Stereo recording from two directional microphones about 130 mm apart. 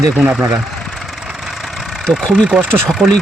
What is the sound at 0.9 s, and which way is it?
Vehicle, centre (ahead or behind).